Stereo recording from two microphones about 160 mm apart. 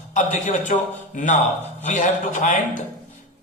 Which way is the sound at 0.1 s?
50° left (ahead or behind).